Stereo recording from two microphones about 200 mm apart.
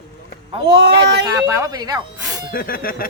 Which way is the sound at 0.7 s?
60° right (ahead or behind).